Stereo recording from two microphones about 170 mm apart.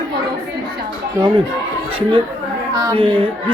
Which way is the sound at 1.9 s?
30° right (ahead or behind).